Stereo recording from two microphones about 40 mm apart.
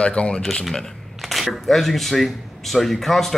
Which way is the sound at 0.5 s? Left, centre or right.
Centre.